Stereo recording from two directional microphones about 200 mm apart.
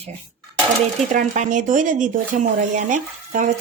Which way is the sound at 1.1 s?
40° right (ahead or behind).